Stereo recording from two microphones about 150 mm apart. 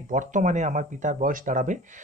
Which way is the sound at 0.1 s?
55° right (ahead or behind).